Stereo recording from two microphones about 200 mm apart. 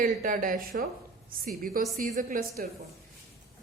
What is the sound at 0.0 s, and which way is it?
Speech, 45° right (ahead or behind).